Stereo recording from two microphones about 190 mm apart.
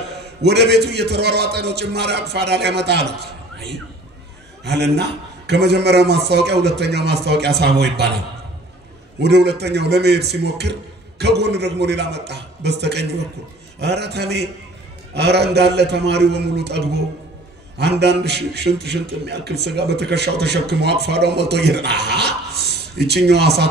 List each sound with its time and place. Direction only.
0.1 s a man's voice: 60° right (ahead or behind)
9.2 s a man's voice: 60° right (ahead or behind)